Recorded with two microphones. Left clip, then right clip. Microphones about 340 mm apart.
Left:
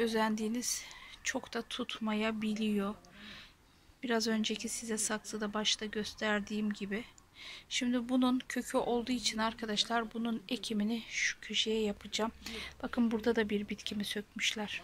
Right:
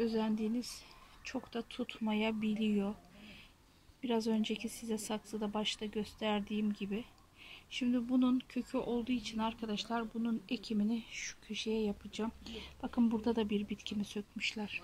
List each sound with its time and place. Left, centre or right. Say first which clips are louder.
0.0 s a woman's voice: left 3 dB; centre